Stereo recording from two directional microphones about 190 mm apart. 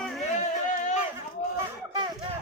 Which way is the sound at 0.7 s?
40° left (ahead or behind).